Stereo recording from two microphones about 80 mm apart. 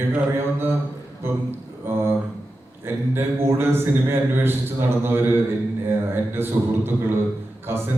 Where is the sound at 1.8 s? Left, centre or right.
Right.